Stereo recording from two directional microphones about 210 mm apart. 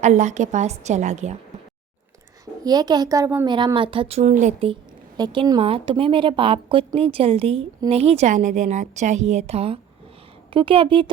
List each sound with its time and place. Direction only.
0.0 s a woman's voice: 35° right (ahead or behind)
2.6 s a woman's voice: 20° right (ahead or behind)